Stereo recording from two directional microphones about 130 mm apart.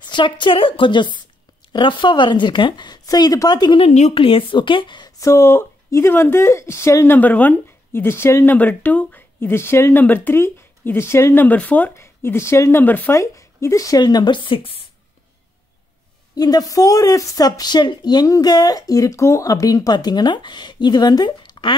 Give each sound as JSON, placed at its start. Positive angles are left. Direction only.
{"t": 0.0, "sound": "speech", "side_deg": 35}
{"t": 3.8, "sound": "speech", "side_deg": 65}
{"t": 4.1, "sound": "speech", "side_deg": 45}
{"t": 16.3, "sound": "speech", "side_deg": 30}